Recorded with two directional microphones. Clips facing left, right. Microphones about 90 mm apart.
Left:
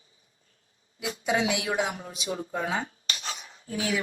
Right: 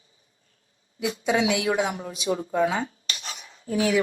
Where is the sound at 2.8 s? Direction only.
35° left (ahead or behind).